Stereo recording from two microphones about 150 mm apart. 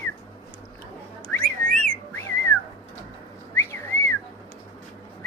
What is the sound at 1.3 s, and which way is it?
Whistling, 5° left (ahead or behind).